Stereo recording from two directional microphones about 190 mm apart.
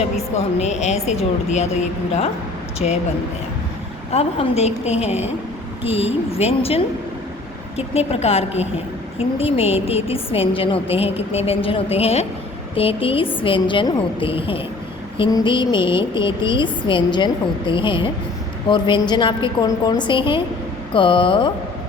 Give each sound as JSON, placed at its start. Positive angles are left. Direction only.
{"t": 0.0, "sound": "a woman's voice", "side_deg": 35}
{"t": 2.7, "sound": "a woman's voice", "side_deg": 35}
{"t": 4.1, "sound": "a woman's voice", "side_deg": 30}